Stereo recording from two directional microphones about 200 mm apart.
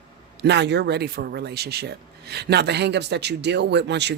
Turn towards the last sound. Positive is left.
turn(degrees=-60)  # may be behind; listen again after turning